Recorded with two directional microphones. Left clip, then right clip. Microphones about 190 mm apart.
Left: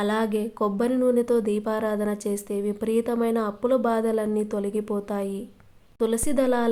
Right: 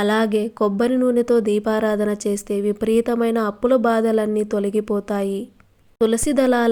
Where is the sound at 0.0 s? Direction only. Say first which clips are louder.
Right 6 dB; 25° right (ahead or behind).